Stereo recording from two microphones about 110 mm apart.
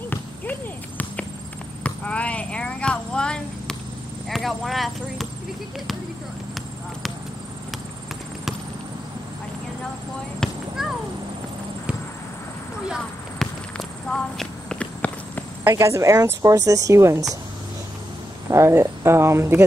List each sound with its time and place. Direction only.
0.1 s basketball bounce: 15° left (ahead or behind)
1.8 s a sound: 10° left (ahead or behind)
4.3 s speech: centre (ahead or behind)
10.4 s a sound: 5° left (ahead or behind)
13.4 s walk: 5° left (ahead or behind)
15.7 s speech: 25° right (ahead or behind)
18.5 s speech: 25° right (ahead or behind)